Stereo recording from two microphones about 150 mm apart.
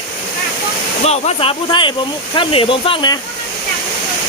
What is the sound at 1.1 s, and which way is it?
Speech, 45° left (ahead or behind).